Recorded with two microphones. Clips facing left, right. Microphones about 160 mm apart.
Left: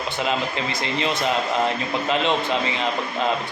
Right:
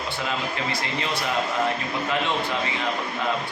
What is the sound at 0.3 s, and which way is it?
A man's voice, 20° left (ahead or behind).